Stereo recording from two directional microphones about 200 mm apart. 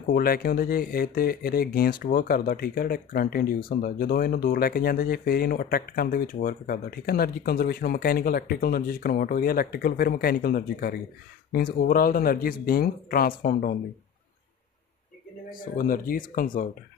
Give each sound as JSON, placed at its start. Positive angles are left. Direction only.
{"t": 0.0, "sound": "speech", "side_deg": 50}
{"t": 15.6, "sound": "speech", "side_deg": 45}